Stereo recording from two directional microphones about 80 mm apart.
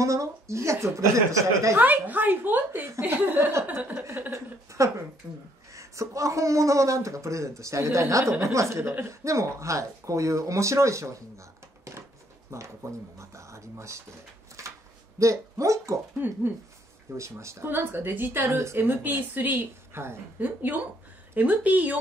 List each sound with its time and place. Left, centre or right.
0.0 s a man's voice: right
1.8 s speech: right
4.3 s a man's voice: right
5.2 s speech: right
5.7 s a man's voice: right
14.6 s a sound: right
15.1 s a man's voice: right
16.2 s speech: right
17.2 s speech: right
20.4 s speech: right